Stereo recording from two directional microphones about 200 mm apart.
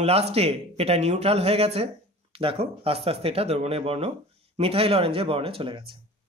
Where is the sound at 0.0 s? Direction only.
30° right (ahead or behind).